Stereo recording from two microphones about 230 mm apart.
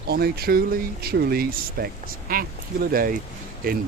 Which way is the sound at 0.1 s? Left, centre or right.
Right.